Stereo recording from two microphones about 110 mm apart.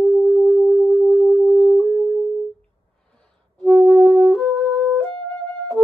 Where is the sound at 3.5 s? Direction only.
5° left (ahead or behind).